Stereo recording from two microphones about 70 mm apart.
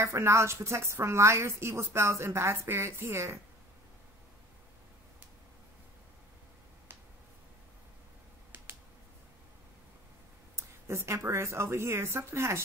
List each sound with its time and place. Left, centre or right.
0.0 s a woman's voice: right
10.5 s speech: right